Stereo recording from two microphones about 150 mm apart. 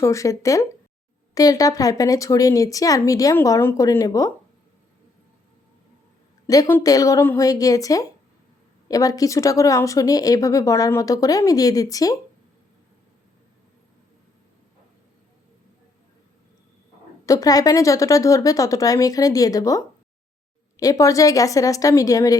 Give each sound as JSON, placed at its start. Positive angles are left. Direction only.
{"t": 0.0, "sound": "speech", "side_deg": 20}
{"t": 6.5, "sound": "speech", "side_deg": 20}
{"t": 17.2, "sound": "speech", "side_deg": 25}